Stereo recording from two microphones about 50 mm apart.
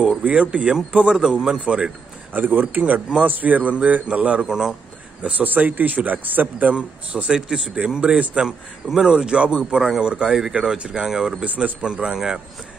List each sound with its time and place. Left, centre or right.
0.2 s a man's voice: right
2.3 s a man's voice: right; by 4.7 s centre
5.2 s speech: right
6.7 s a man's voice: right
11.4 s a man's voice: right
11.8 s speech: centre